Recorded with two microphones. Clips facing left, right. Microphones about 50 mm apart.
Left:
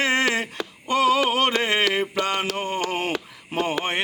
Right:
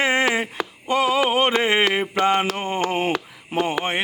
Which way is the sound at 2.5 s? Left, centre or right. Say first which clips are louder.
Right 1 dB; centre.